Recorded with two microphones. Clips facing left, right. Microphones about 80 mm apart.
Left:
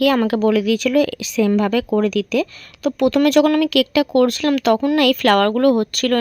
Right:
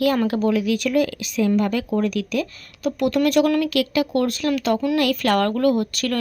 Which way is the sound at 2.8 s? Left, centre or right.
Left.